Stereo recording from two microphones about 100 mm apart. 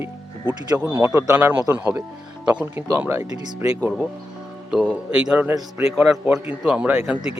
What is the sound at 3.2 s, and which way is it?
Speech, 40° right (ahead or behind).